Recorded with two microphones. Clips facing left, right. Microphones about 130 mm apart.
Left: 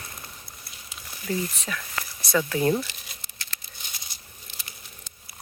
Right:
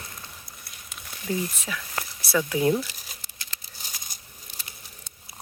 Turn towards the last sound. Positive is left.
turn(degrees=-45)  # may be behind; listen again after turning